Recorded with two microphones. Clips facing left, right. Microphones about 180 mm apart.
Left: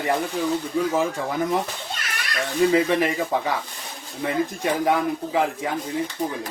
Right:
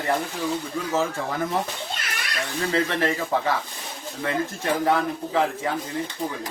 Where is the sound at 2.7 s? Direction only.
15° left (ahead or behind).